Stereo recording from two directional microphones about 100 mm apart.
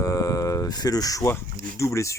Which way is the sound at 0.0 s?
35° left (ahead or behind).